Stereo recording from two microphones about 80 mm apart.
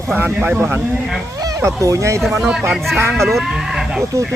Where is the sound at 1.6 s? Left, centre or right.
Right.